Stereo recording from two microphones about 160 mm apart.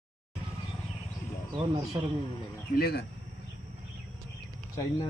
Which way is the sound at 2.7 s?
75° left (ahead or behind).